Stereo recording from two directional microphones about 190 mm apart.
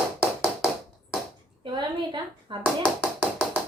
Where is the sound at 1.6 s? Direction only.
25° right (ahead or behind).